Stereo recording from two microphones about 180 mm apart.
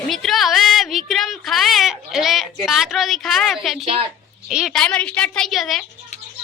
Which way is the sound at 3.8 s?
35° right (ahead or behind).